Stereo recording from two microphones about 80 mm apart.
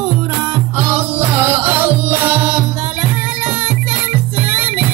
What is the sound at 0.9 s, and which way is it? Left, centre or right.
Music, right.